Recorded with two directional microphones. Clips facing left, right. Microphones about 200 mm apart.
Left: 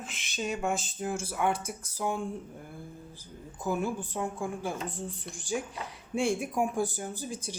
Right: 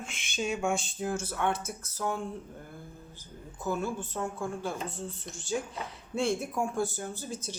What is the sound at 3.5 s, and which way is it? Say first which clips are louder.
Speech: left 1 dB; 15° left (ahead or behind).